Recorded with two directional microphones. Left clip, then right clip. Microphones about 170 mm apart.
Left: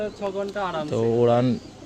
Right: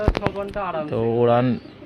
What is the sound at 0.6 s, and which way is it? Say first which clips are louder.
Speech: right 2 dB; 90° left.